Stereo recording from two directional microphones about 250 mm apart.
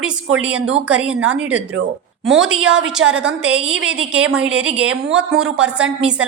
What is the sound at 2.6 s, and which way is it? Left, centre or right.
Speech, right.